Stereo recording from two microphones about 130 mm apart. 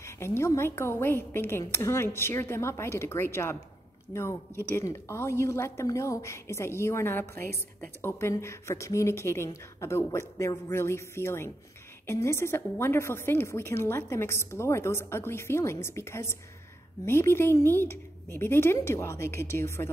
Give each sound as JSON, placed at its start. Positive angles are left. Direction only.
{"t": 0.0, "sound": "a woman's voice", "side_deg": 20}